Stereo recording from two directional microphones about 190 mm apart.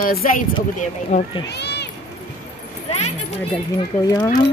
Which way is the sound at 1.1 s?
35° left (ahead or behind).